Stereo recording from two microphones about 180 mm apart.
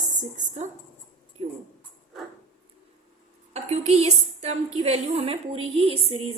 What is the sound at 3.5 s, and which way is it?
A woman's voice, 35° right (ahead or behind).